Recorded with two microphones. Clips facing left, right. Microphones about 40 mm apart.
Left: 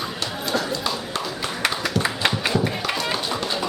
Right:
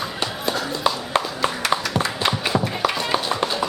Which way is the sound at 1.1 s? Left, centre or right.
Right.